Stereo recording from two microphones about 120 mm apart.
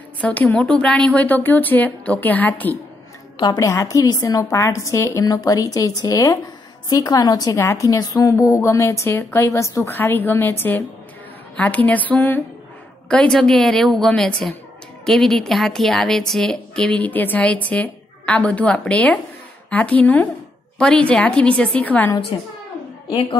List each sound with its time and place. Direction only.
0.2 s a woman's voice: 15° left (ahead or behind)
3.5 s a woman's voice: 25° left (ahead or behind)